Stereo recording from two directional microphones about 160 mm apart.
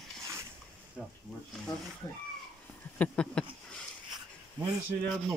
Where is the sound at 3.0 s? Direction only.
5° left (ahead or behind).